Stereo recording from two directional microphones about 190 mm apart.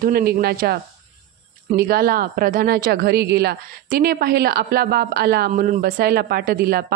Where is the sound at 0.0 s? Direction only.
50° right (ahead or behind).